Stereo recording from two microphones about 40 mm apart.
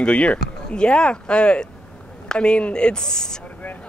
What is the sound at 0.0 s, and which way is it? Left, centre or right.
Speech, left.